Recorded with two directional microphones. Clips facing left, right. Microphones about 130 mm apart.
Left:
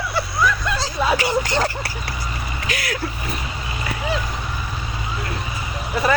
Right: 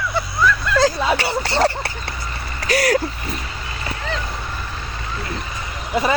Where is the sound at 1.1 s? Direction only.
30° right (ahead or behind).